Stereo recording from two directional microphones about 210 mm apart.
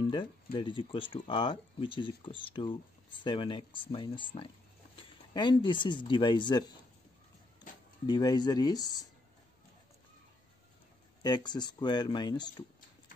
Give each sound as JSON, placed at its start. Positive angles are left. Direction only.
{"t": 0.1, "sound": "speech", "side_deg": 25}
{"t": 8.1, "sound": "speech", "side_deg": 20}
{"t": 11.2, "sound": "speech", "side_deg": 20}